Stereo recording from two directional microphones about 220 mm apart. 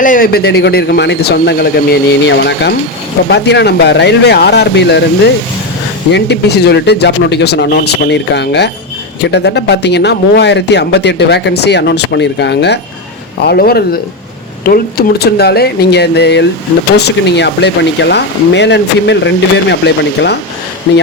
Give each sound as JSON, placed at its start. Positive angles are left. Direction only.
{"t": 0.0, "sound": "speech", "side_deg": 40}